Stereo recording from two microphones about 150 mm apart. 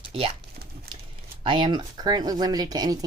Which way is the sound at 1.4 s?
30° right (ahead or behind).